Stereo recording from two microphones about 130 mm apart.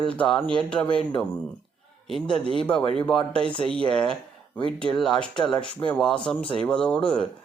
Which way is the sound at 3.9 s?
5° left (ahead or behind).